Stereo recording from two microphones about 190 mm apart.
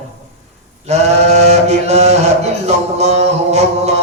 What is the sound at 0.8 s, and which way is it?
A man's voice, 35° right (ahead or behind).